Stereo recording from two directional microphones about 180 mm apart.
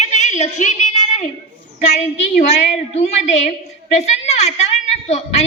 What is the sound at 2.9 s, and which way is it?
A woman's voice, 40° left (ahead or behind).